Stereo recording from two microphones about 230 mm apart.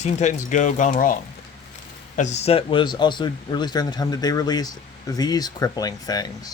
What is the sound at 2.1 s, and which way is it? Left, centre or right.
Speech, left.